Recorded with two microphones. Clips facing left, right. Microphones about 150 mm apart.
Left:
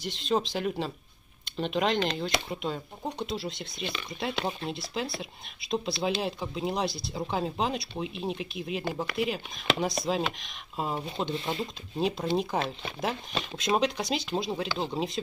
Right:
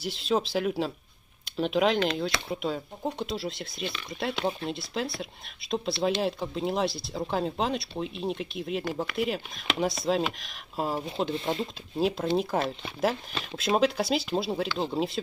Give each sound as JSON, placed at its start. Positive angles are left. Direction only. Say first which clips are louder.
{"t": 0.0, "sound": "speech", "louder": "right 1 dB", "side_deg": -5}